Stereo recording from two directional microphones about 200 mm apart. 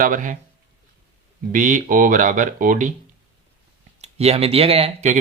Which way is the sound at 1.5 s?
40° right (ahead or behind).